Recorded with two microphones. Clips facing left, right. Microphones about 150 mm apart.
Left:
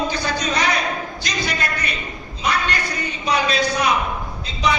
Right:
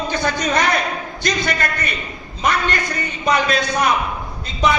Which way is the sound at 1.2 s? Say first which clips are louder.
Right 8 dB; 50° right (ahead or behind).